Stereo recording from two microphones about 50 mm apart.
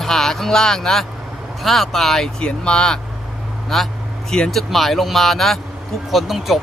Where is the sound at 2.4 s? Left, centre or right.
Centre.